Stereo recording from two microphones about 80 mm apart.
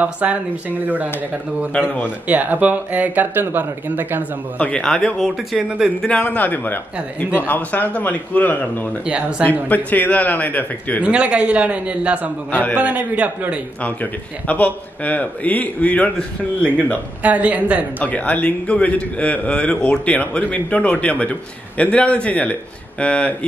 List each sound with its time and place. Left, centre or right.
0.0 s speech: centre
1.7 s a man's voice: left
2.0 s speech: centre
4.6 s a man's voice: centre
6.0 s a man's voice: centre
11.0 s a man's voice: centre
12.4 s a man's voice: centre
12.7 s a man's voice: centre
14.5 s a man's voice: centre
17.2 s a man's voice: centre
17.9 s a man's voice: centre